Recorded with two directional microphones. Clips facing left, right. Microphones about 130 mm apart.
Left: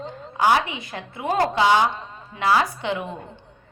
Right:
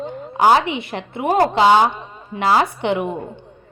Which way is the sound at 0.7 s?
70° right (ahead or behind).